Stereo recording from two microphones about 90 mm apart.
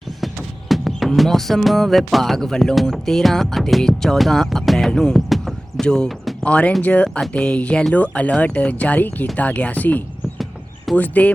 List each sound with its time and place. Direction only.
0.7 s speech: centre (ahead or behind); by 11.3 s 15° left (ahead or behind)